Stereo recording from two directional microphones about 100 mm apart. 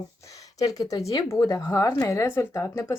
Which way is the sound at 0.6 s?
35° left (ahead or behind).